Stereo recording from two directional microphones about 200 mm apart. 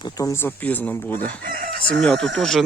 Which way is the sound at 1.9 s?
5° left (ahead or behind).